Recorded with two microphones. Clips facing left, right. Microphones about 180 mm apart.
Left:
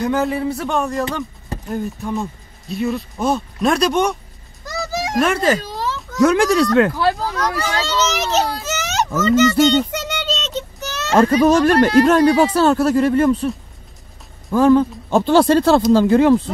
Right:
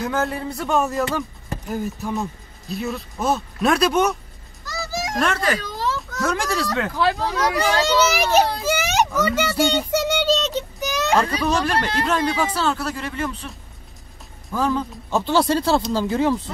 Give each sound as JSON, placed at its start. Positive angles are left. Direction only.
{"t": 0.0, "sound": "speech", "side_deg": 0}
{"t": 5.4, "sound": "speech", "side_deg": 25}
{"t": 6.2, "sound": "speech", "side_deg": 60}
{"t": 7.0, "sound": "speech", "side_deg": 0}
{"t": 7.5, "sound": "a child's voice", "side_deg": -15}
{"t": 8.6, "sound": "a sound", "side_deg": -10}
{"t": 11.1, "sound": "speech", "side_deg": 50}
{"t": 14.5, "sound": "speech", "side_deg": 55}